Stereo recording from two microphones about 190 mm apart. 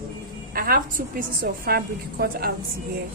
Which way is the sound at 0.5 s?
50° right (ahead or behind).